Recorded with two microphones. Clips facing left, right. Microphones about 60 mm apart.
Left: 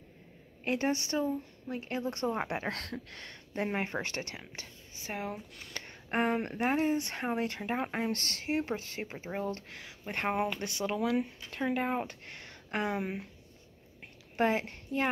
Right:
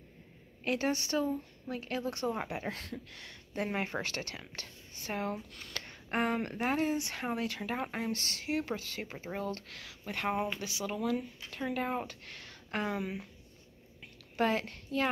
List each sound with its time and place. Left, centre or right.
0.7 s speech: left
2.4 s speech: left
3.5 s speech: left
5.0 s speech: centre
6.9 s speech: left
10.1 s speech: left
11.5 s speech: left
14.3 s a woman's voice: left